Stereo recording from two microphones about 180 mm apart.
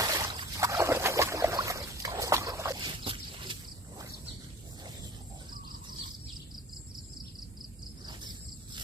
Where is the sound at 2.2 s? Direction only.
15° right (ahead or behind).